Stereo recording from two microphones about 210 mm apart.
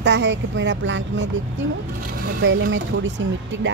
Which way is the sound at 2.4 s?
60° right (ahead or behind).